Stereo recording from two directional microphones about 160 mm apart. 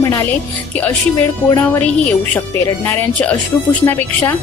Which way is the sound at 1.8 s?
10° left (ahead or behind).